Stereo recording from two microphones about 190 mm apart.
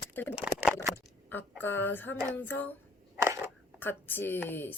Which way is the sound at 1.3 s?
10° left (ahead or behind).